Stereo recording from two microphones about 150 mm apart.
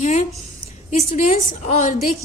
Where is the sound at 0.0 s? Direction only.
50° left (ahead or behind).